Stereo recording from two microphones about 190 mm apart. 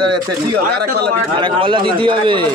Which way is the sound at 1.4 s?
25° right (ahead or behind).